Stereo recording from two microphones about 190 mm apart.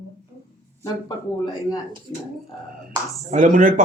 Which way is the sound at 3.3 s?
45° right (ahead or behind).